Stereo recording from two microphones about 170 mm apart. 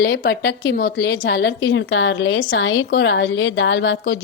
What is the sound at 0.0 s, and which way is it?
A woman's voice, 90° left.